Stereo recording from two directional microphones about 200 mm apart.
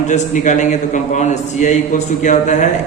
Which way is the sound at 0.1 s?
35° left (ahead or behind).